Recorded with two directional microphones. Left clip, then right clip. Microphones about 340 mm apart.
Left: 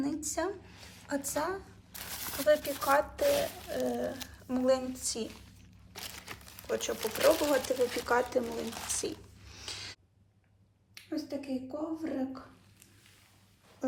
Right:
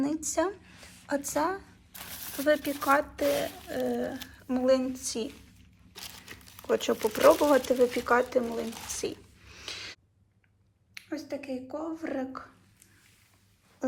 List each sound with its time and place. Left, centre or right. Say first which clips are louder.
0.0 s speech: right 5 dB; centre
6.6 s speech: right 7 dB; centre
11.1 s speech: right 1 dB; centre